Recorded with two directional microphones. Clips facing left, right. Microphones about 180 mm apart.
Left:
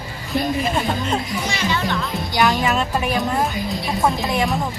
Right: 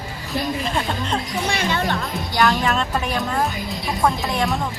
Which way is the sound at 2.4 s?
5° left (ahead or behind).